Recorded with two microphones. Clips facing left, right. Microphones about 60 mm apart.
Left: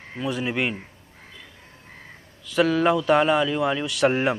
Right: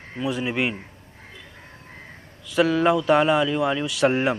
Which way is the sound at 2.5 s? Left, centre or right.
Centre.